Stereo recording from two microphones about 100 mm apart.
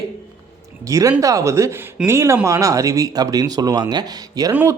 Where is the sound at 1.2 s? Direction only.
35° right (ahead or behind).